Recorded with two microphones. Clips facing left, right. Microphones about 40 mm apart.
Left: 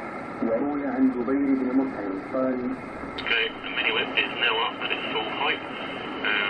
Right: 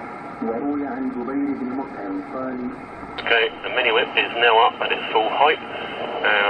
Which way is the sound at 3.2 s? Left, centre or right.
Right.